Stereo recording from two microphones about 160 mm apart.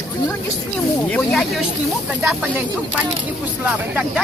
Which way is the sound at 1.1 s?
5° left (ahead or behind).